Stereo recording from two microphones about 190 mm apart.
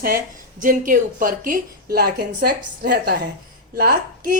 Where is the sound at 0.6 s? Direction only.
45° right (ahead or behind).